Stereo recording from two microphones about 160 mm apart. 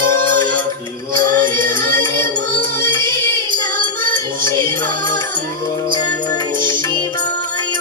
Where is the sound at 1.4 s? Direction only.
60° right (ahead or behind).